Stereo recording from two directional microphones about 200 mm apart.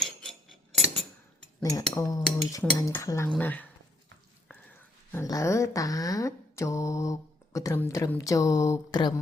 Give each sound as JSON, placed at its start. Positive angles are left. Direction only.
{"t": 0.0, "sound": "scissors", "side_deg": 0}
{"t": 2.0, "sound": "dishes", "side_deg": 15}
{"t": 4.4, "sound": "speech", "side_deg": 10}